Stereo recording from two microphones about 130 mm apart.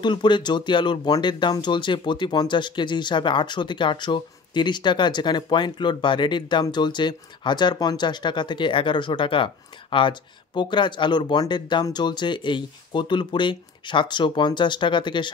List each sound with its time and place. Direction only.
0.0 s speech: 35° left (ahead or behind)